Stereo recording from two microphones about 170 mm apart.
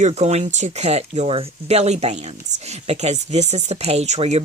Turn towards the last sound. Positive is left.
turn(degrees=-40)  # may be behind; listen again after turning